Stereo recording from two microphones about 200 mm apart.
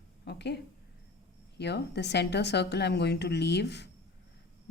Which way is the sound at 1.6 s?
55° left (ahead or behind).